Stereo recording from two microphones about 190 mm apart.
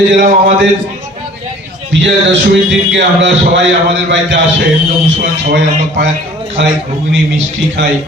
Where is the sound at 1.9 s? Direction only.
70° right (ahead or behind).